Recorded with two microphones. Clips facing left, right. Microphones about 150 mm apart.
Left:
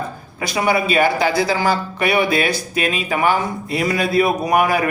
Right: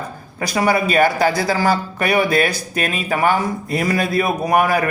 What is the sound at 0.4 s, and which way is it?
Speech, 45° right (ahead or behind).